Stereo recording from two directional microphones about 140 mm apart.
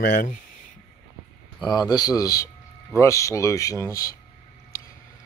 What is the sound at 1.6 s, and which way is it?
Speech, 30° left (ahead or behind).